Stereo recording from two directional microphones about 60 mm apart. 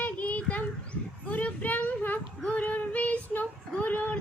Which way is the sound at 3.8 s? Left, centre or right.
Left.